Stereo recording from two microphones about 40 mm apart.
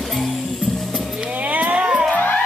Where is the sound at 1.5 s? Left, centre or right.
Right.